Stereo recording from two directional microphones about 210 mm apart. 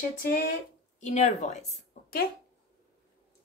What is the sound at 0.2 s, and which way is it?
A woman's voice, 40° left (ahead or behind).